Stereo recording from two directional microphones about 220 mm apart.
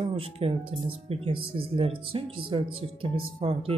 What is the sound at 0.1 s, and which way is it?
Speech, 25° right (ahead or behind).